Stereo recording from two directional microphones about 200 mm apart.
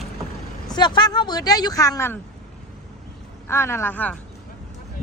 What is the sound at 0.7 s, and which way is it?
A woman's voice, 20° left (ahead or behind).